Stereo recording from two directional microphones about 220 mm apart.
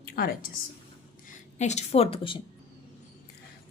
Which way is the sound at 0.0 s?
40° left (ahead or behind).